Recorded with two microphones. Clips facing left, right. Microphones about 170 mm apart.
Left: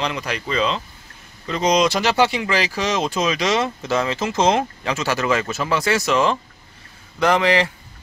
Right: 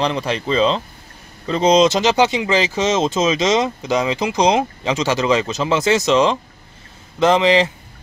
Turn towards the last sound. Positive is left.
turn(degrees=-20)  # may be behind; listen again after turning